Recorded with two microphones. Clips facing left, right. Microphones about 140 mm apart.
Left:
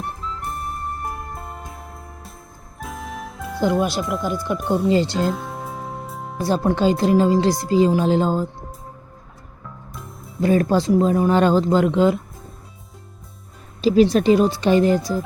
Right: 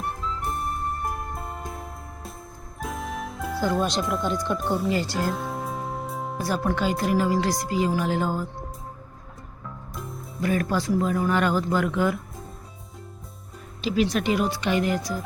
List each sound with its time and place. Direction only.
0.0 s music: centre (ahead or behind)
3.8 s speech: 5° left (ahead or behind)
4.9 s speech: 25° left (ahead or behind)
5.3 s music: centre (ahead or behind)
6.4 s speech: 25° left (ahead or behind)
9.6 s music: centre (ahead or behind)
10.4 s speech: 30° left (ahead or behind)
13.8 s speech: 35° left (ahead or behind)